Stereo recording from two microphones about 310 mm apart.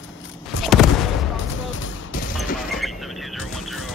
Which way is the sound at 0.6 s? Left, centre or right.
Centre.